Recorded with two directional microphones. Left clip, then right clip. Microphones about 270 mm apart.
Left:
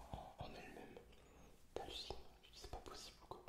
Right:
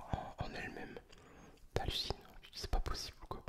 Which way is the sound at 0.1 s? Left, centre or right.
Right.